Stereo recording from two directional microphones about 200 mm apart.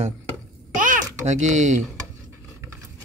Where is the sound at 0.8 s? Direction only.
40° right (ahead or behind).